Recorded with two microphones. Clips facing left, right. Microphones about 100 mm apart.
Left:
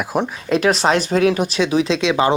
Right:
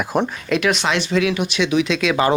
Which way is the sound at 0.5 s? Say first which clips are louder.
Left 4 dB; 35° left (ahead or behind).